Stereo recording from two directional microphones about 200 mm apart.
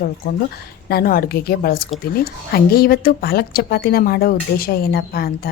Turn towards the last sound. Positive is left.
turn(degrees=50)  # may be behind; listen again after turning